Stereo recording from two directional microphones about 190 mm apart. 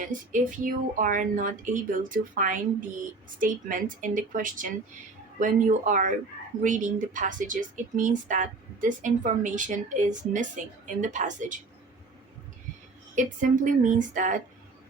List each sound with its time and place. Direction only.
0.1 s a woman's voice: 45° right (ahead or behind)
13.1 s speech: 45° right (ahead or behind)